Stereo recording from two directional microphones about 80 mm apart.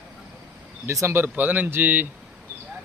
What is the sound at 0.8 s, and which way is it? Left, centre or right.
Speech, right.